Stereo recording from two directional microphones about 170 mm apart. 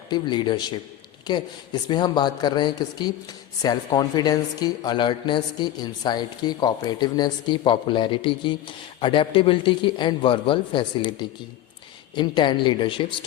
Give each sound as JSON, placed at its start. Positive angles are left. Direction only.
{"t": 0.1, "sound": "speech", "side_deg": 25}